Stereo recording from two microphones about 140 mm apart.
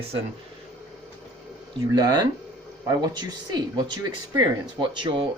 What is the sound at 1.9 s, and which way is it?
Speech, 30° right (ahead or behind).